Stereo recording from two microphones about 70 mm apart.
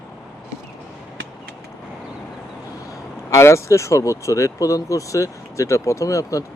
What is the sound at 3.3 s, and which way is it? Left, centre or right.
Speech, left.